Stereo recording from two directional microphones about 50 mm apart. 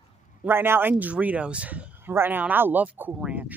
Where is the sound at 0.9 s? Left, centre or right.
Right.